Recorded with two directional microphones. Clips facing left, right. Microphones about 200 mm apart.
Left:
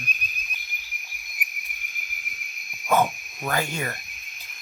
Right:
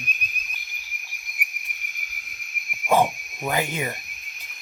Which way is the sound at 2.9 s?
30° right (ahead or behind).